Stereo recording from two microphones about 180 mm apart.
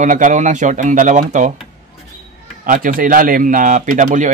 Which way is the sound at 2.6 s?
50° right (ahead or behind).